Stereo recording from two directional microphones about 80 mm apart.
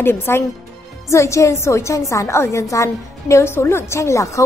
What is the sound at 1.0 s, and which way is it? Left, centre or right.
A woman's voice, left.